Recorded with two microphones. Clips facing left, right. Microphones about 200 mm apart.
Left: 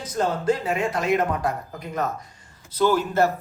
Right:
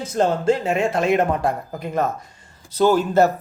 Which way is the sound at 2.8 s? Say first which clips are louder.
Right 4 dB; 30° right (ahead or behind).